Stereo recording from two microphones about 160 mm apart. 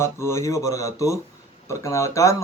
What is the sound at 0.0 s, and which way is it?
A man's voice, 15° left (ahead or behind).